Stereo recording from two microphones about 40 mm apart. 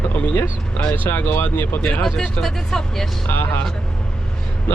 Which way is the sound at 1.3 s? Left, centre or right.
Left.